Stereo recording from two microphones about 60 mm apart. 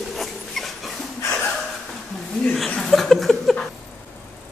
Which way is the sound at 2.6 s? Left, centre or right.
Centre.